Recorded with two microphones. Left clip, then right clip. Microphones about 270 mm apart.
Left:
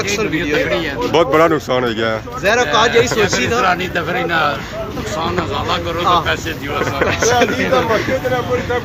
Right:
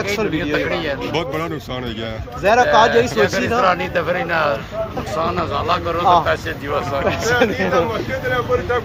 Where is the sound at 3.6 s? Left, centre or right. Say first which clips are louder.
Left 1 dB; centre.